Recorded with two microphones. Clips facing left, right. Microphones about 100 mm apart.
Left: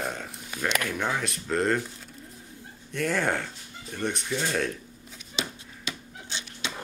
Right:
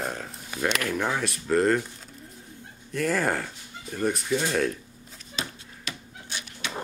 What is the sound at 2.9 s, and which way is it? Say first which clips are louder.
Speech: right 1 dB; centre (ahead or behind).